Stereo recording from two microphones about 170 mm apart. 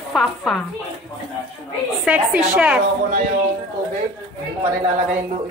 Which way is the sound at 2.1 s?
5° right (ahead or behind).